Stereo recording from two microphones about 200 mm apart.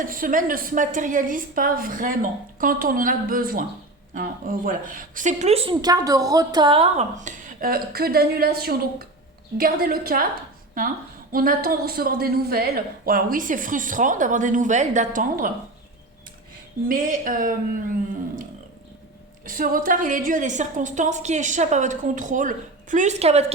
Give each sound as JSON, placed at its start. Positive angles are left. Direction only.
{"t": 0.0, "sound": "a woman's voice", "side_deg": -45}
{"t": 16.9, "sound": "a woman's voice", "side_deg": -45}
{"t": 19.5, "sound": "a woman's voice", "side_deg": -45}